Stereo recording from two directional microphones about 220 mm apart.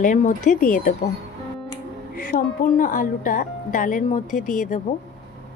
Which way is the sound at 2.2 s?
40° left (ahead or behind).